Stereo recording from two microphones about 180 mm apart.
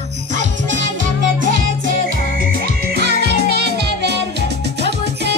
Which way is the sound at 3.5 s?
65° right (ahead or behind).